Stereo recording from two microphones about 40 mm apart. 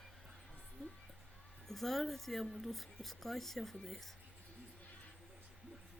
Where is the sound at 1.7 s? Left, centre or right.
Centre.